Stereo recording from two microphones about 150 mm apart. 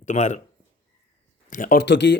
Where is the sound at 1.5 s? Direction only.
65° left (ahead or behind).